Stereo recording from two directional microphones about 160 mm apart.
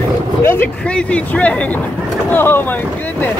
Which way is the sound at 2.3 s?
10° left (ahead or behind).